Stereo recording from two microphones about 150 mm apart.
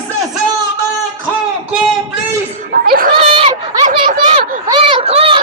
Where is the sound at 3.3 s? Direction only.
40° right (ahead or behind).